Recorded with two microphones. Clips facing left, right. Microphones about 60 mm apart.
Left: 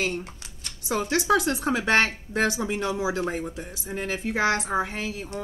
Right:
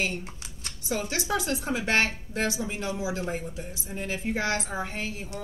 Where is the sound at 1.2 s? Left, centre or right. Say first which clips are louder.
Left 6 dB; left.